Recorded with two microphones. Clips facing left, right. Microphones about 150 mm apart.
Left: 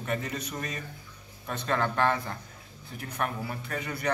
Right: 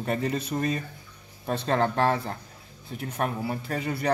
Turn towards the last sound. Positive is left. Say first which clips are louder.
# right 5 dB
turn(degrees=-30)  # may be behind; listen again after turning